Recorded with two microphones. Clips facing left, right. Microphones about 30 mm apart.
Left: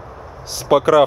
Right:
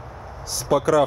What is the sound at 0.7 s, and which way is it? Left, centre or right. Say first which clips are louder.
Speech: left 6 dB; left.